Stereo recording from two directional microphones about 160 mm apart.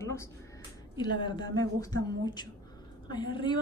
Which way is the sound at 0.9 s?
30° left (ahead or behind).